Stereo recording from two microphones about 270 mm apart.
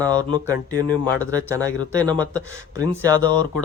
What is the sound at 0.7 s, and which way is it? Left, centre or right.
Speech, centre.